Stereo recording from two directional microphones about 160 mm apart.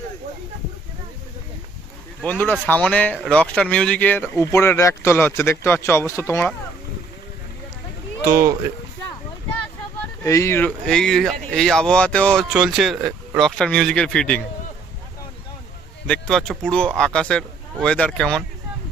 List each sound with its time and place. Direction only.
2.2 s speech: 10° left (ahead or behind)
8.2 s speech: 20° right (ahead or behind)
10.2 s speech: 20° left (ahead or behind)
16.0 s speech: 5° left (ahead or behind)